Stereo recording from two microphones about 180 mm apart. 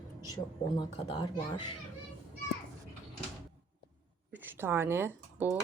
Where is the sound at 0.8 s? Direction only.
30° left (ahead or behind).